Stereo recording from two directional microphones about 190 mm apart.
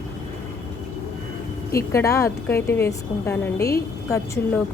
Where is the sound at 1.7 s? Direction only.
15° left (ahead or behind).